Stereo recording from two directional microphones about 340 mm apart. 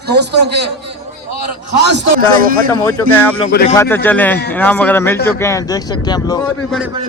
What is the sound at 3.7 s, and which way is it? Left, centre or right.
A man's voice, centre.